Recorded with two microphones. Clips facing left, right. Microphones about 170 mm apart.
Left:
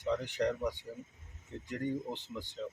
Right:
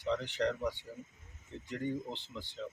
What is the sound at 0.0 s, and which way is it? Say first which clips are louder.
Speech: left 1 dB; 15° left (ahead or behind).